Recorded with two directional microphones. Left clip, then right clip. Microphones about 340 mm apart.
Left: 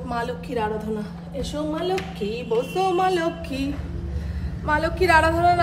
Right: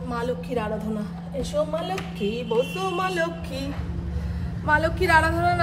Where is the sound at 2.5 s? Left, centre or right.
Centre.